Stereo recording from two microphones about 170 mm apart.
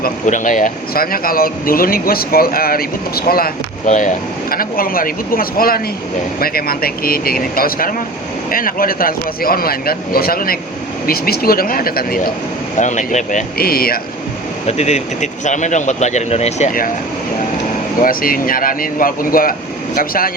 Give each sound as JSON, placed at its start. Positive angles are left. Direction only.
{"t": 0.0, "sound": "speech", "side_deg": 50}
{"t": 3.8, "sound": "speech", "side_deg": 45}
{"t": 12.7, "sound": "speech", "side_deg": 45}
{"t": 14.7, "sound": "speech", "side_deg": 40}
{"t": 18.0, "sound": "speech", "side_deg": 55}